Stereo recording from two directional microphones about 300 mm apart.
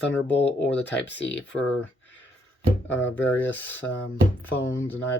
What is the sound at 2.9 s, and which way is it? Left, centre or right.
Speech, left.